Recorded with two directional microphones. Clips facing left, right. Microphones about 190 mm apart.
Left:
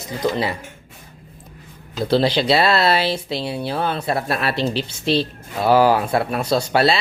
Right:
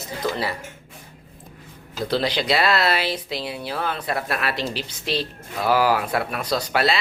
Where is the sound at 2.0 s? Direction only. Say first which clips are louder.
Left 5 dB; 30° left (ahead or behind).